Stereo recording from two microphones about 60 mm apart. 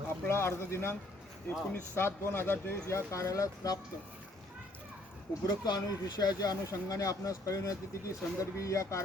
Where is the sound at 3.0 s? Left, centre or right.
Left.